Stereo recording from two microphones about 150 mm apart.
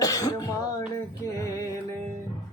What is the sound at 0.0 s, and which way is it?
Throat clearing, 25° left (ahead or behind).